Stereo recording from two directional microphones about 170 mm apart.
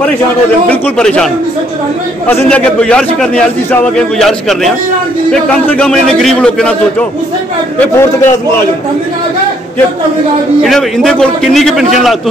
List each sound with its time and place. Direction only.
0.7 s a man's voice: 5° left (ahead or behind)
10.6 s a man's voice: centre (ahead or behind)